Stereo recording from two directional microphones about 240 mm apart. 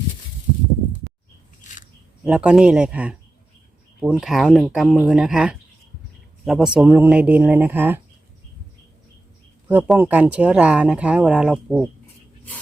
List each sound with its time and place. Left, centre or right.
1.6 s scissors: left
2.2 s speech: centre
9.6 s speech: centre